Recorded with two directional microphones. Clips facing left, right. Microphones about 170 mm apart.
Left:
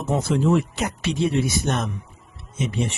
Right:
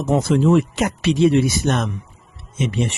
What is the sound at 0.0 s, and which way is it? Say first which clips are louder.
Speech: right 5 dB; 90° right.